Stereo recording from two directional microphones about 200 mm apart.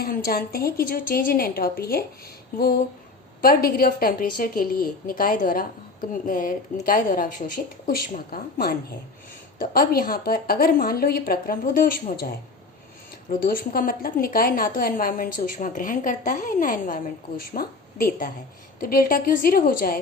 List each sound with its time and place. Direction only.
0.0 s a woman's voice: 50° left (ahead or behind)
3.4 s a woman's voice: 45° left (ahead or behind)
13.4 s a woman's voice: 45° left (ahead or behind)